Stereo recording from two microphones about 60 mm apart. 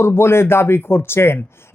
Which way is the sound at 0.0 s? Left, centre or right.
Left.